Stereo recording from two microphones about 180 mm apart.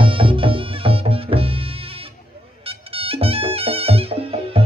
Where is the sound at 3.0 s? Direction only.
30° right (ahead or behind).